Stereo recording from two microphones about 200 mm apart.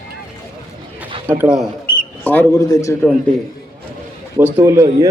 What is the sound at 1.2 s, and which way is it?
Speech, 5° right (ahead or behind).